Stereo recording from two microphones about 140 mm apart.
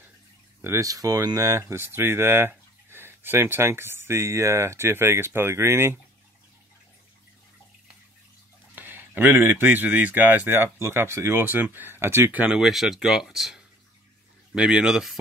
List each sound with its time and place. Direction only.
0.6 s speech: 20° right (ahead or behind)
8.7 s speech: 15° right (ahead or behind)